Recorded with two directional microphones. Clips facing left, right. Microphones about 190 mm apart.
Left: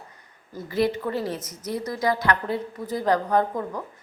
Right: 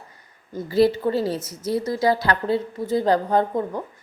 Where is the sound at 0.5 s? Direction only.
30° right (ahead or behind).